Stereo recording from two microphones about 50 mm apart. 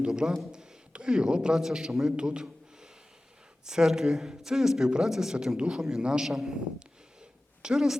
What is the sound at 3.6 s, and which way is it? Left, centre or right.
A man's voice, centre.